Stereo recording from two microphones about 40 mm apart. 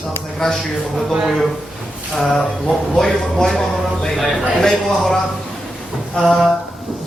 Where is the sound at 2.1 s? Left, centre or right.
Centre.